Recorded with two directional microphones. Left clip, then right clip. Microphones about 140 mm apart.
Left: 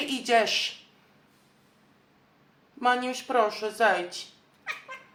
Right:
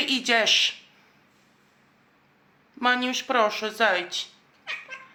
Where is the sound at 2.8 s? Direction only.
25° right (ahead or behind).